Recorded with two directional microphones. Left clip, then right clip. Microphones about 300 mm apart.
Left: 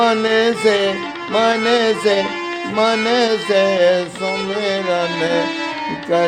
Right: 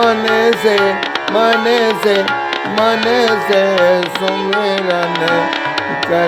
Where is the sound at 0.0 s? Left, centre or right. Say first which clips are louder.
Right 3 dB; centre.